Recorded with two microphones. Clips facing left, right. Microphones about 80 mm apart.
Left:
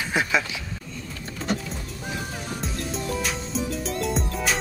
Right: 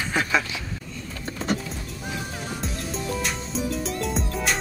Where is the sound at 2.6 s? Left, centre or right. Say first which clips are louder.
Left 1 dB; centre.